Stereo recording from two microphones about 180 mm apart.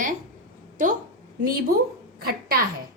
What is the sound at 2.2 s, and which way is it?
Speech, 55° right (ahead or behind).